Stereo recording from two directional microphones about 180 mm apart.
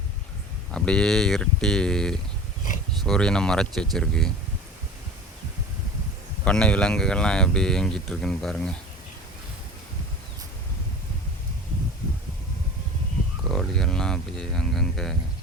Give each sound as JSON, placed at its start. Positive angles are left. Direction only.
{"t": 0.7, "sound": "speech", "side_deg": 5}
{"t": 2.6, "sound": "speech", "side_deg": 45}
{"t": 3.0, "sound": "speech", "side_deg": 5}
{"t": 6.4, "sound": "speech", "side_deg": 5}
{"t": 13.5, "sound": "speech", "side_deg": 5}